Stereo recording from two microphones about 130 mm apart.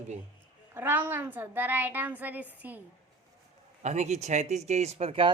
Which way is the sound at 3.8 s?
65° right (ahead or behind).